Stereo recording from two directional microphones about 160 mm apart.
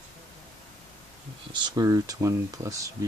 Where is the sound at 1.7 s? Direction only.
20° right (ahead or behind).